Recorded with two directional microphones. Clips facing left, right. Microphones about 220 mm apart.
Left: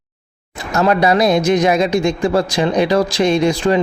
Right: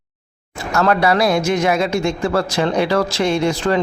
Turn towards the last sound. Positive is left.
turn(degrees=15)  # may be behind; listen again after turning